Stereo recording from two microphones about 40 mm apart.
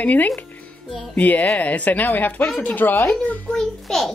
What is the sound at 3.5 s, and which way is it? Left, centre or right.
Speech, centre.